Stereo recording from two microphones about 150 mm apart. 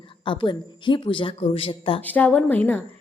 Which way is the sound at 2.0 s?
10° left (ahead or behind).